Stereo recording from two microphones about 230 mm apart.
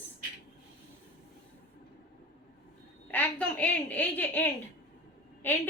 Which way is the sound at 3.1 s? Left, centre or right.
Centre.